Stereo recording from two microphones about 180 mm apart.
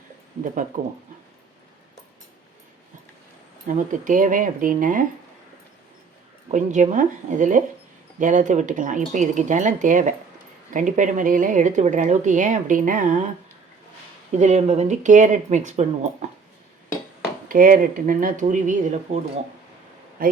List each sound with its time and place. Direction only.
3.7 s a woman's voice: 45° right (ahead or behind)
6.5 s a woman's voice: 40° right (ahead or behind)
14.3 s speech: 40° right (ahead or behind)
17.5 s a woman's voice: 50° right (ahead or behind)